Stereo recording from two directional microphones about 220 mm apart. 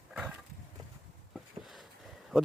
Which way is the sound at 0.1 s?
5° right (ahead or behind).